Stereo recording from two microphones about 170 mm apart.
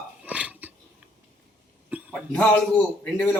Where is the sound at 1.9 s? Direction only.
5° right (ahead or behind).